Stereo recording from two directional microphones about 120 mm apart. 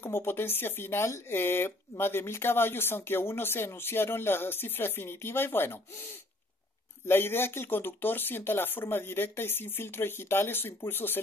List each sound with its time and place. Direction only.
0.0 s speech: 20° left (ahead or behind)
7.1 s speech: 20° left (ahead or behind)